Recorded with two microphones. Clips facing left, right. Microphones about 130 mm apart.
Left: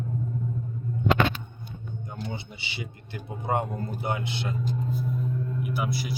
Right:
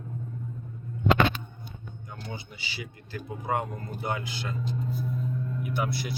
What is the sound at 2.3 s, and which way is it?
Speech, 25° left (ahead or behind).